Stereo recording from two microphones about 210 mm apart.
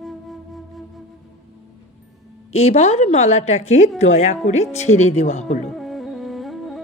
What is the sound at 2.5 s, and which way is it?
Speech, 30° left (ahead or behind).